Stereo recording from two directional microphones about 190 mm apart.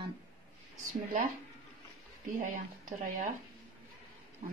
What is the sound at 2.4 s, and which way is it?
Speech, 45° right (ahead or behind).